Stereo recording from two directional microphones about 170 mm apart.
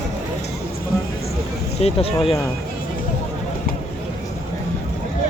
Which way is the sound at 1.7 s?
35° left (ahead or behind).